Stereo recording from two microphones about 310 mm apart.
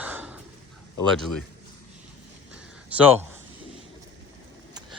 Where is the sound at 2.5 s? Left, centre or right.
Centre.